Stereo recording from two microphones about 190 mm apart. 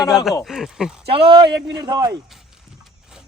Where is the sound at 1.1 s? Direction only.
30° right (ahead or behind).